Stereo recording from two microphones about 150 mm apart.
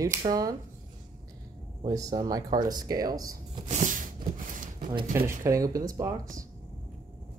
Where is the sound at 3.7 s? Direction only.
60° right (ahead or behind).